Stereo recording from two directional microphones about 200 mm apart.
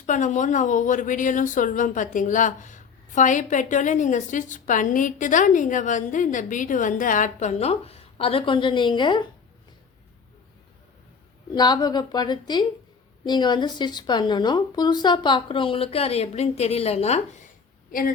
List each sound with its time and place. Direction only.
0.0 s a woman's voice: 40° left (ahead or behind); by 9.2 s 25° left (ahead or behind)
11.5 s a woman's voice: 20° left (ahead or behind)